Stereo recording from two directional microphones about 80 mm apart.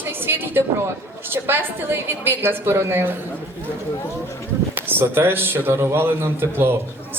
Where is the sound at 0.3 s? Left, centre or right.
Right.